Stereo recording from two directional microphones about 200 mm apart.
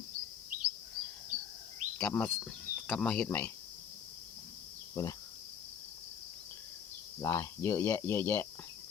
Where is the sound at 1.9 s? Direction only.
5° left (ahead or behind).